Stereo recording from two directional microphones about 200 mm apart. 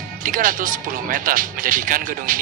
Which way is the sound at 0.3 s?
45° right (ahead or behind).